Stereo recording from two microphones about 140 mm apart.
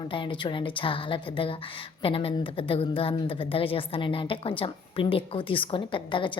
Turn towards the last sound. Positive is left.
turn(degrees=35)  # may be behind; listen again after turning